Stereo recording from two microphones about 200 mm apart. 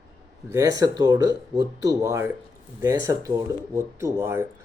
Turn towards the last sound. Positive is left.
turn(degrees=-15)  # may be behind; listen again after turning